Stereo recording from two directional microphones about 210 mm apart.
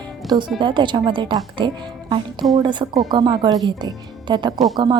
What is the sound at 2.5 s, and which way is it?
Speech, 20° right (ahead or behind).